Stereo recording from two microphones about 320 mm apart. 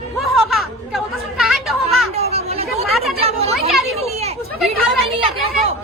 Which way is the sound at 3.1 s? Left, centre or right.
Centre.